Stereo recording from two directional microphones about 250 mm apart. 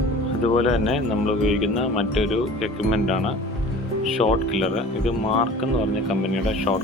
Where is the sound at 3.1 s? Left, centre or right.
Left.